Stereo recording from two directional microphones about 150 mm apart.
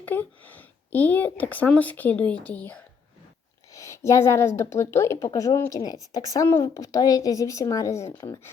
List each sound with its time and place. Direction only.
0.0 s speech: 10° left (ahead or behind)
3.8 s speech: 20° left (ahead or behind)